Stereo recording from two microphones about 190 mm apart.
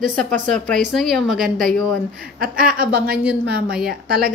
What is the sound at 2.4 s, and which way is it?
A woman's voice, 50° right (ahead or behind).